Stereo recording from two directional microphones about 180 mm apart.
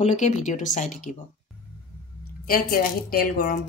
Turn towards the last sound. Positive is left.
turn(degrees=55)  # may be behind; listen again after turning